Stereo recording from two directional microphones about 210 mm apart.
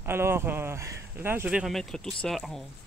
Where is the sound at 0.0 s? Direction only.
10° right (ahead or behind).